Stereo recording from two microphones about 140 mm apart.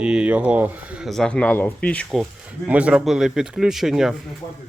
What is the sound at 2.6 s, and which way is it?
Speech, 10° right (ahead or behind).